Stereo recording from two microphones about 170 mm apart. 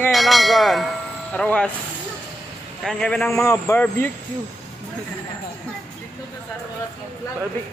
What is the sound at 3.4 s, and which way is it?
Speech, 15° left (ahead or behind).